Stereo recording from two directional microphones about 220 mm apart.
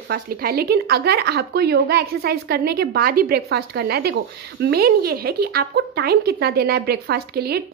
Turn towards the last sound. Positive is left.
turn(degrees=-45)  # may be behind; listen again after turning